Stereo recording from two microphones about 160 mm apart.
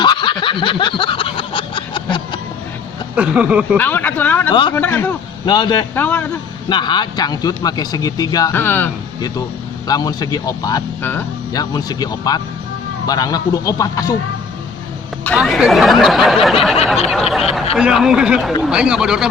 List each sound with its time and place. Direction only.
0.0 s snicker: 30° left (ahead or behind)
3.2 s speech: 10° right (ahead or behind)
3.8 s speech: 10° left (ahead or behind)
5.5 s speech: 25° left (ahead or behind)
5.9 s speech: 10° left (ahead or behind)
6.7 s speech: 30° left (ahead or behind)
8.5 s speech: 15° left (ahead or behind)
9.8 s speech: 25° left (ahead or behind)
15.4 s speech: centre (ahead or behind)